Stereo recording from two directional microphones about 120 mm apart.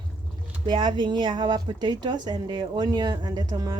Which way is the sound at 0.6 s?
40° right (ahead or behind).